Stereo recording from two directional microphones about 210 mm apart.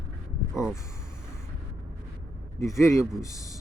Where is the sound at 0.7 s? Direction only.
15° left (ahead or behind).